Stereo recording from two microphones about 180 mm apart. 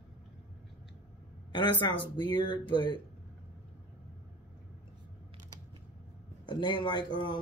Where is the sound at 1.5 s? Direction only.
25° left (ahead or behind).